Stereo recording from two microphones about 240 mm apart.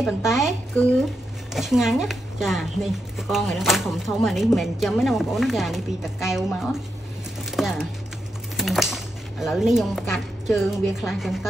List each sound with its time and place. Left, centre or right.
0.0 s speech: centre
8.5 s typewriter: centre
10.6 s speech: centre